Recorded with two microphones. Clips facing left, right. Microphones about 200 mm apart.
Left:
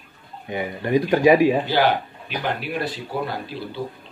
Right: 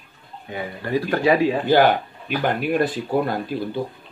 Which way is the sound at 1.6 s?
50° right (ahead or behind).